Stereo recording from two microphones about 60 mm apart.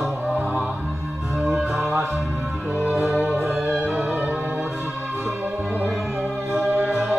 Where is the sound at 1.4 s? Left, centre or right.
Centre.